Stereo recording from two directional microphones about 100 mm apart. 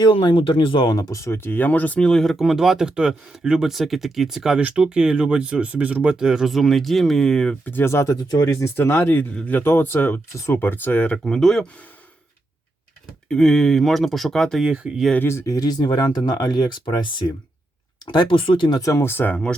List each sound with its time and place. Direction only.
0.0 s speech: 50° left (ahead or behind); by 7.7 s 5° left (ahead or behind)
7.7 s speech: 25° left (ahead or behind)
11.2 s speech: 5° left (ahead or behind)
13.2 s speech: 5° left (ahead or behind)
14.7 s speech: 10° right (ahead or behind)
15.2 s speech: 30° left (ahead or behind); by 18.8 s 50° left (ahead or behind)
18.8 s speech: 30° left (ahead or behind); by 19.5 s 15° left (ahead or behind)